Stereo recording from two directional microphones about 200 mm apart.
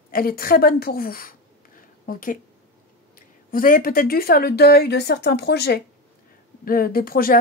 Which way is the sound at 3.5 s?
45° left (ahead or behind).